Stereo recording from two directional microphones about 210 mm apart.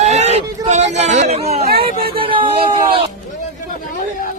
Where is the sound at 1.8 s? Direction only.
25° right (ahead or behind).